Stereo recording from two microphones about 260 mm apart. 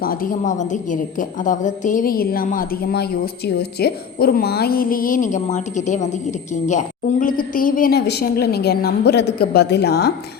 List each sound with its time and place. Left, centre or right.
0.0 s a woman's voice: left